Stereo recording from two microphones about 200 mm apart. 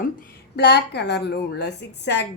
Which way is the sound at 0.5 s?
55° left (ahead or behind).